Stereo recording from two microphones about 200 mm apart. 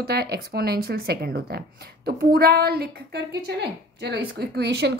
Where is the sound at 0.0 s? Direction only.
50° right (ahead or behind).